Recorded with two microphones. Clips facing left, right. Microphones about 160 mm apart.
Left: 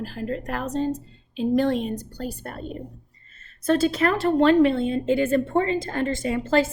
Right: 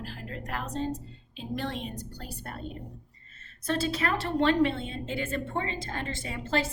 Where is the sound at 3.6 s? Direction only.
45° left (ahead or behind).